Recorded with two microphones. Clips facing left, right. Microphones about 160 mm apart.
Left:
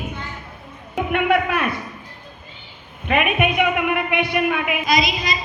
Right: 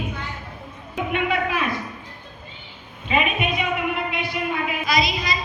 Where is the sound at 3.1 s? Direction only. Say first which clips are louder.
Left 3 dB; 60° left (ahead or behind).